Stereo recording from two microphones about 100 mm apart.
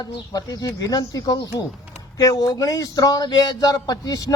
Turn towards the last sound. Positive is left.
turn(degrees=40)  # may be behind; listen again after turning